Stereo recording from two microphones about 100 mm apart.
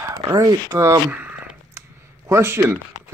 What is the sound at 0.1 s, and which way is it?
Speech, 40° right (ahead or behind).